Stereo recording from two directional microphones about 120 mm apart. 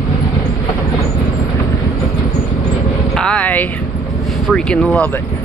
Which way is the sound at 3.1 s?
5° left (ahead or behind).